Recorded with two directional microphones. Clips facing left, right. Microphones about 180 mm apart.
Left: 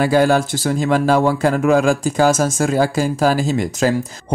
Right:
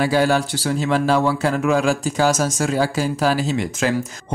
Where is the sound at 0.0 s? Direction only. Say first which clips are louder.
Left 3 dB; 45° left (ahead or behind).